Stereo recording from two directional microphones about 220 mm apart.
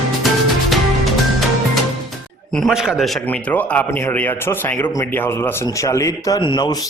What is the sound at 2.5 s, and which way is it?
A man's voice, centre (ahead or behind).